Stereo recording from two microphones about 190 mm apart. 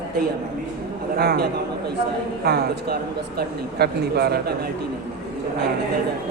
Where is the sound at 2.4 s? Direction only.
55° right (ahead or behind).